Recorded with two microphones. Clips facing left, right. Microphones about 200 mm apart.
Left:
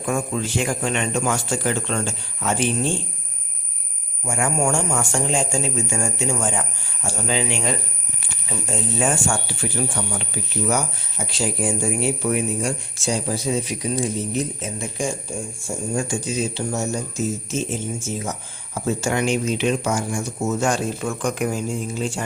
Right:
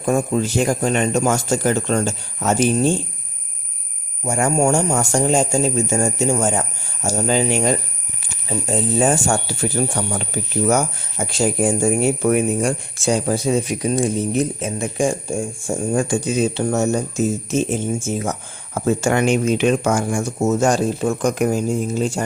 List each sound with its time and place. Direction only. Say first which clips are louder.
0.0 s speech: right 5 dB; 40° right (ahead or behind)
4.3 s speech: right 5 dB; 40° right (ahead or behind)
14.8 s speech: right 7 dB; 70° right (ahead or behind)
15.9 s speech: right 5 dB; 60° right (ahead or behind)
18.2 s speech: right 5 dB; 55° right (ahead or behind); by 22.2 s 40° right (ahead or behind)